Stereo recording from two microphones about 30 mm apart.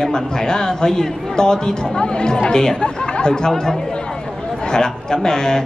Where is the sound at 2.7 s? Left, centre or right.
Left.